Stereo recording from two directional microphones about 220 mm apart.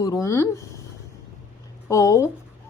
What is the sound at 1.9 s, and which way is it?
Speech, 15° left (ahead or behind).